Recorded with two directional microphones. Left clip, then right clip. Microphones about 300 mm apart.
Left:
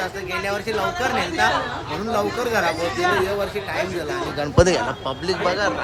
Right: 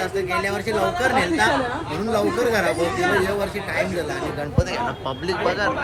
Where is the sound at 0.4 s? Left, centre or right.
Centre.